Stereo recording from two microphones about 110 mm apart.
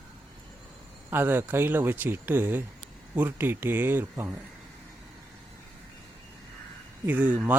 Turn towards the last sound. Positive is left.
turn(degrees=-15)  # may be behind; listen again after turning